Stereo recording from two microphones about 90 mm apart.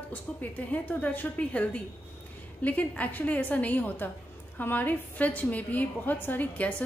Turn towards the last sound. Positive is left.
turn(degrees=15)  # may be behind; listen again after turning